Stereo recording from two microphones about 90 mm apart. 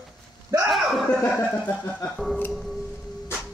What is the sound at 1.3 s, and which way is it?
Speech, 10° left (ahead or behind).